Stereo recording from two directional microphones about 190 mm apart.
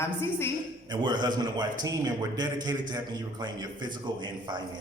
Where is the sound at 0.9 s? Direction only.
25° right (ahead or behind).